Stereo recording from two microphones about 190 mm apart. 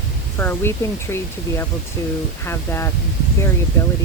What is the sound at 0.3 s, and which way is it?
Speech, 10° left (ahead or behind).